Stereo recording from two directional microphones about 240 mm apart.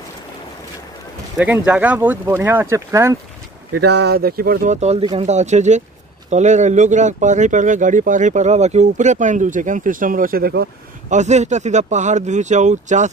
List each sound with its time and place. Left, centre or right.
1.4 s speech: centre
3.8 s speech: right
11.1 s speech: right